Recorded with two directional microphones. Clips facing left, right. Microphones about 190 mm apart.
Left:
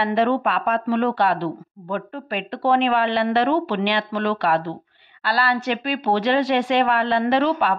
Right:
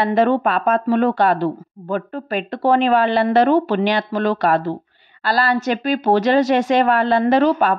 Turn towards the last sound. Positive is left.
turn(degrees=-45)  # may be behind; listen again after turning